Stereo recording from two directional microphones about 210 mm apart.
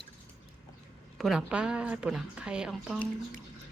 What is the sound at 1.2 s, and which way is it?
A woman's voice, centre (ahead or behind).